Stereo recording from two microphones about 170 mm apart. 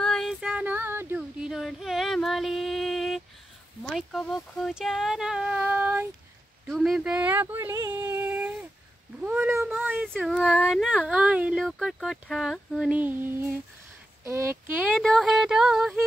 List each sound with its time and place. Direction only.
0.0 s female singing: centre (ahead or behind)
3.8 s speech: centre (ahead or behind)
6.7 s a sound: centre (ahead or behind)
9.2 s cat: 10° right (ahead or behind)
9.9 s speech: centre (ahead or behind); by 14.9 s 15° right (ahead or behind)
15.0 s speech: centre (ahead or behind)